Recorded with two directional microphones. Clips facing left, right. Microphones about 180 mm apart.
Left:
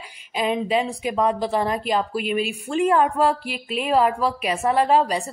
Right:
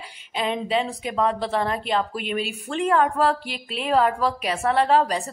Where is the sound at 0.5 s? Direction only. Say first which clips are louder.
Left 2 dB; 10° left (ahead or behind).